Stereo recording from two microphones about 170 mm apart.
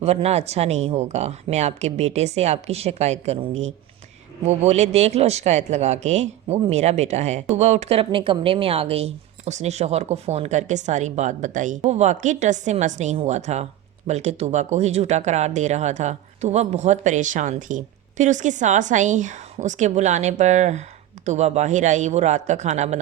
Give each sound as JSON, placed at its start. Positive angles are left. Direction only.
{"t": 0.0, "sound": "speech", "side_deg": -40}